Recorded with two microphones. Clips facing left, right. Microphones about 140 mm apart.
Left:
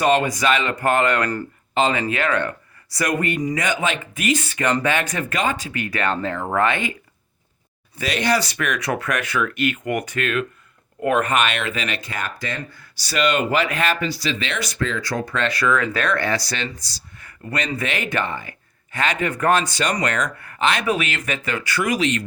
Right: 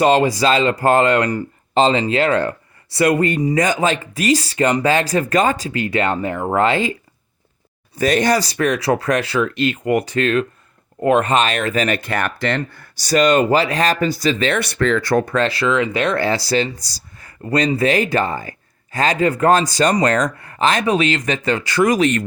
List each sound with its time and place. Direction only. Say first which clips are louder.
0.0 s speech: right 4 dB; 30° right (ahead or behind)
7.9 s speech: right 5 dB; 45° right (ahead or behind)
12.0 s speech: right 8 dB; 65° right (ahead or behind)
15.4 s speech: right 3 dB; 30° right (ahead or behind)
16.8 s a sound: right 1 dB; 35° right (ahead or behind)
17.7 s speech: right 9 dB; 35° right (ahead or behind)